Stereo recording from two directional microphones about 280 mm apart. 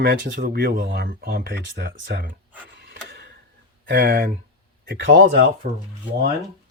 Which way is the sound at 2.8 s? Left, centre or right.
Right.